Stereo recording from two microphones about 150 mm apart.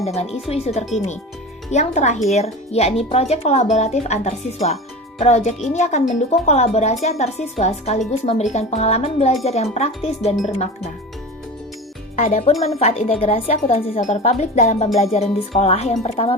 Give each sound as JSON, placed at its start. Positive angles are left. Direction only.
{"t": 0.0, "sound": "speech", "side_deg": 45}
{"t": 12.1, "sound": "speech", "side_deg": 50}